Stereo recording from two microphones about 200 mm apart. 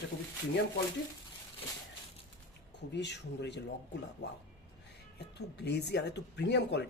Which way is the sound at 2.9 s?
60° left (ahead or behind).